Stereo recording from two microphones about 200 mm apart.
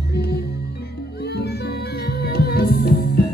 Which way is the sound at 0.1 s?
55° left (ahead or behind).